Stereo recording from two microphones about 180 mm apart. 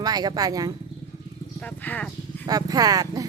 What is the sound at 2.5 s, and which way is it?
Speech, 20° right (ahead or behind).